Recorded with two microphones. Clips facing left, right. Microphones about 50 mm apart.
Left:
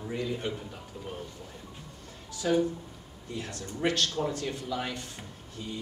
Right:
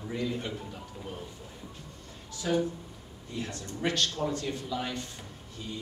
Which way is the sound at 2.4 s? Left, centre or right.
Centre.